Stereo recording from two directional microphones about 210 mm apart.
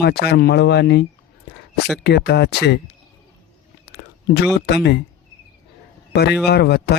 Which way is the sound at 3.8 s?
50° left (ahead or behind).